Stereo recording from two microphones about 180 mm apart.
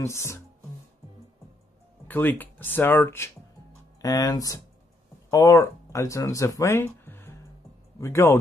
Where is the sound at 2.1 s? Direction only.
10° left (ahead or behind).